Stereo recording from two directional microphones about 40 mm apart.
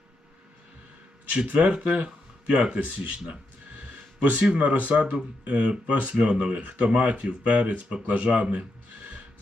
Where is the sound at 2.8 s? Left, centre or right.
Right.